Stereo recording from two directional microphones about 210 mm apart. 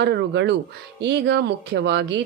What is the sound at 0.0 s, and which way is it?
Speech, 55° right (ahead or behind).